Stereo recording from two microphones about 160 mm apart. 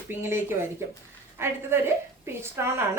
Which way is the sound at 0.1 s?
15° right (ahead or behind).